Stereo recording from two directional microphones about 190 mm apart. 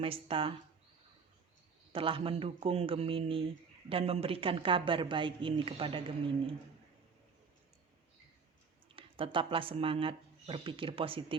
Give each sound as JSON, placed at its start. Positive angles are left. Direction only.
{"t": 0.0, "sound": "speech", "side_deg": -30}
{"t": 1.9, "sound": "speech", "side_deg": -30}
{"t": 9.0, "sound": "speech", "side_deg": -30}